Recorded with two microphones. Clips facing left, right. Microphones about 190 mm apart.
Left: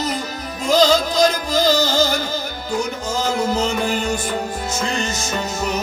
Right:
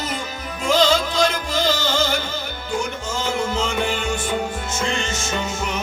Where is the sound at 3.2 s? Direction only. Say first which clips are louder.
Left 3 dB; 40° left (ahead or behind).